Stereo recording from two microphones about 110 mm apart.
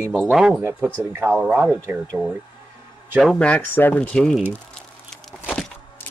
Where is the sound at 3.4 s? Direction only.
10° left (ahead or behind).